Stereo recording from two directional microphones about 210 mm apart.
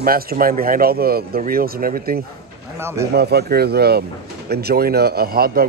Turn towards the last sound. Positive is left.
turn(degrees=-45)  # may be behind; listen again after turning